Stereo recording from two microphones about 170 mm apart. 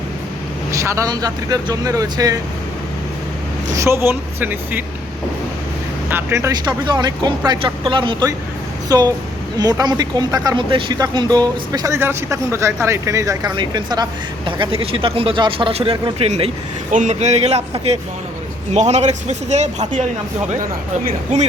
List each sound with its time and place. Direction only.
0.8 s speech: 20° right (ahead or behind)
3.8 s speech: 15° right (ahead or behind)
6.1 s a man's voice: 15° right (ahead or behind); by 20.1 s 45° right (ahead or behind)